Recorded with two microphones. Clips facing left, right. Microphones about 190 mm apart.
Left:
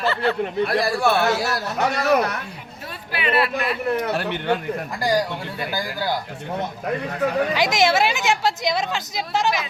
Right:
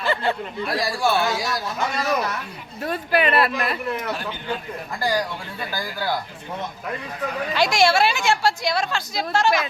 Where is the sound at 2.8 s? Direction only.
45° right (ahead or behind).